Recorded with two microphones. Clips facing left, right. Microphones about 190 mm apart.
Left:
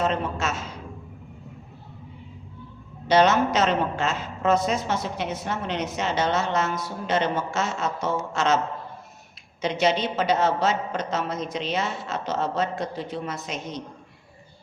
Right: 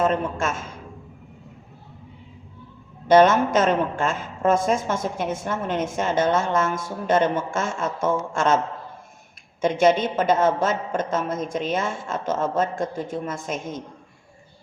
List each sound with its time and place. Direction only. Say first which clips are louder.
0.0 s a woman's voice: right 3 dB; 50° right (ahead or behind)
3.1 s a woman's voice: right 4 dB; 50° right (ahead or behind)